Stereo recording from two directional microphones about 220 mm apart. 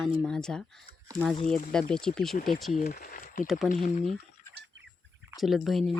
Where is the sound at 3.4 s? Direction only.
Centre (ahead or behind).